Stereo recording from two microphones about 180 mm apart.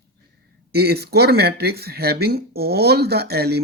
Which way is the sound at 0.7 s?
60° right (ahead or behind).